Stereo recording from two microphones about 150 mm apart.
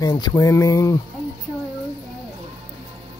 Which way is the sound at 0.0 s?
25° left (ahead or behind).